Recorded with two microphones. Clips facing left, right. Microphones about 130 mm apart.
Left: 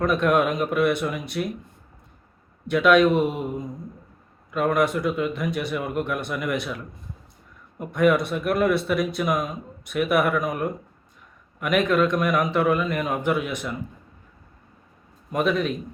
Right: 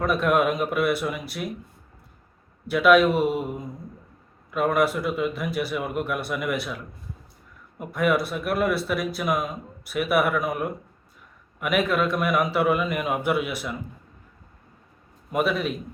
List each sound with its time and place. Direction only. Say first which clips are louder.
0.0 s speech: left 1 dB; 5° right (ahead or behind)
2.6 s a man's voice: even; 5° right (ahead or behind)
15.3 s a man's voice: left 1 dB; 5° right (ahead or behind)